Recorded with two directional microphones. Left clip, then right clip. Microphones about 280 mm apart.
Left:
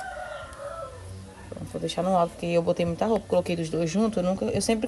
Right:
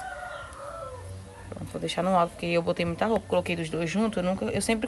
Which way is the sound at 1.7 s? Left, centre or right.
Centre.